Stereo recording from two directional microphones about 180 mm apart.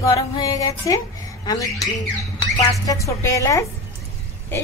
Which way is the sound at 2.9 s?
15° left (ahead or behind).